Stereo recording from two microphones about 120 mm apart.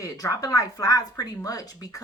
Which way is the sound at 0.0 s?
30° left (ahead or behind).